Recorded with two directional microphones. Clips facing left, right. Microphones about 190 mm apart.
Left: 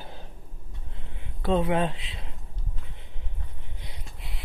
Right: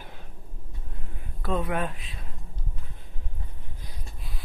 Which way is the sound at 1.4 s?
25° left (ahead or behind).